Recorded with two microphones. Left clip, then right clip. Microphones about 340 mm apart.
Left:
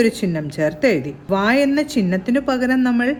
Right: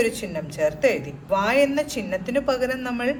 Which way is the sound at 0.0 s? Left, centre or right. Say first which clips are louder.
Left 5 dB; left.